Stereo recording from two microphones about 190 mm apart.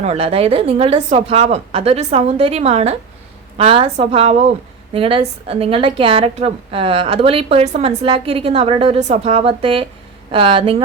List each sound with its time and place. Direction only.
0.0 s a woman's voice: 35° right (ahead or behind)